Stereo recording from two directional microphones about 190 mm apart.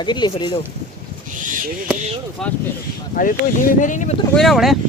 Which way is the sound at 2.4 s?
5° left (ahead or behind).